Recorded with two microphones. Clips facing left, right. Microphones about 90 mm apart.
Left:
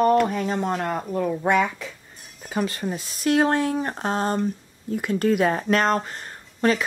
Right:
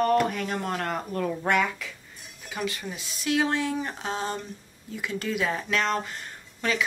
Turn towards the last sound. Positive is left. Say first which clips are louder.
# left 6 dB
turn(degrees=40)  # may be behind; listen again after turning